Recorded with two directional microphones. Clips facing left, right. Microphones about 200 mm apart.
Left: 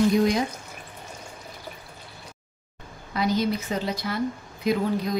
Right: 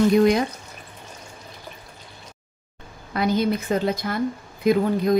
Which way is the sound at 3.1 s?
55° right (ahead or behind).